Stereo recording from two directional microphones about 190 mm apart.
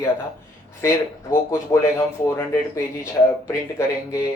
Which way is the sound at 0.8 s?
15° left (ahead or behind).